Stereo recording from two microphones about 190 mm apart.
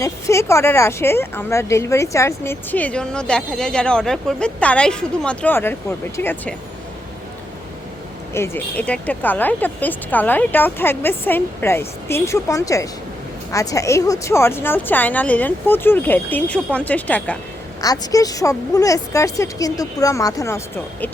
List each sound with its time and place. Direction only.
0.0 s a woman's voice: 15° left (ahead or behind)
8.3 s a woman's voice: 10° left (ahead or behind)
17.7 s a woman's voice: 20° left (ahead or behind)